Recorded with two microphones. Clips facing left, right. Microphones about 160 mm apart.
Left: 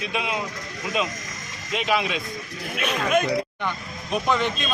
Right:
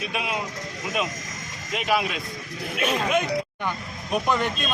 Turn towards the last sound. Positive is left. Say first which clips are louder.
# left 1 dB
turn(degrees=-5)  # may be behind; listen again after turning